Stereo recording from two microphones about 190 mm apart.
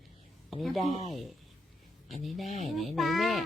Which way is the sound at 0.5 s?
Centre (ahead or behind).